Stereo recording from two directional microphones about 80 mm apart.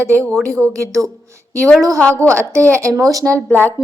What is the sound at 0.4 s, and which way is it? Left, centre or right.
Speech, right.